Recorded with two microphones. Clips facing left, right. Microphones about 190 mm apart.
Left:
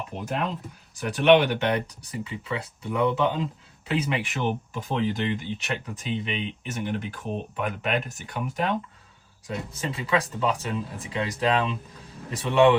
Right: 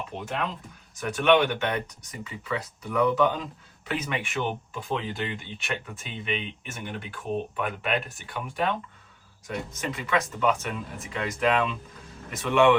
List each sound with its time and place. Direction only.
0.1 s speech: 30° right (ahead or behind)
0.9 s speech: 35° left (ahead or behind)